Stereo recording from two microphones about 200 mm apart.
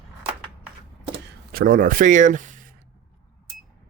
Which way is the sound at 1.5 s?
45° right (ahead or behind).